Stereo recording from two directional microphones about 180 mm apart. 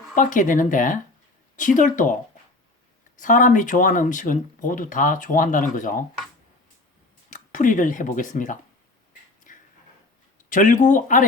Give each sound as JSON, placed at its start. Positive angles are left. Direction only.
{"t": 0.2, "sound": "speech", "side_deg": 45}
{"t": 3.2, "sound": "speech", "side_deg": 45}
{"t": 7.3, "sound": "speech", "side_deg": 45}
{"t": 9.5, "sound": "a sound", "side_deg": 45}
{"t": 10.5, "sound": "speech", "side_deg": 45}